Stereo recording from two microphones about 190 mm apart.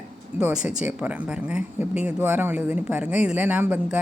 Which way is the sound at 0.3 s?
5° right (ahead or behind).